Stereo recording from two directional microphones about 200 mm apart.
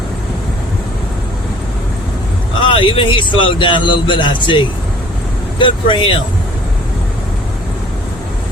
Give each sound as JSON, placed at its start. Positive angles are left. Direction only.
{"t": 2.6, "sound": "a man's voice", "side_deg": 25}